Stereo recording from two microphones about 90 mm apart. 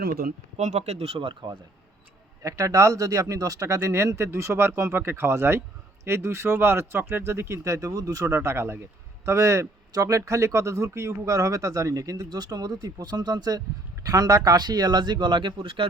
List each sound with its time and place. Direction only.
1.0 s speech: 80° right; by 1.5 s 65° right (ahead or behind)
2.4 s speech: 35° right (ahead or behind); by 15.9 s 75° right (ahead or behind)